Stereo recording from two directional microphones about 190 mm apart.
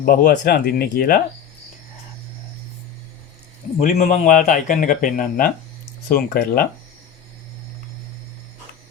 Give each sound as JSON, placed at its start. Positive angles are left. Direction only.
{"t": 0.0, "sound": "speech", "side_deg": 50}
{"t": 3.8, "sound": "speech", "side_deg": 40}